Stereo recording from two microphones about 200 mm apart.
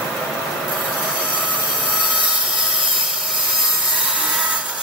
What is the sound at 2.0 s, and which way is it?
Wood, 5° right (ahead or behind).